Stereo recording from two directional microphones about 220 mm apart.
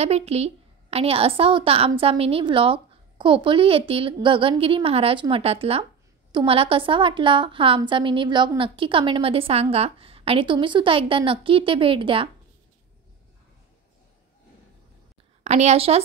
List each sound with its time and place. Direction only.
0.0 s a woman's voice: 30° right (ahead or behind)
15.4 s a woman's voice: 30° right (ahead or behind)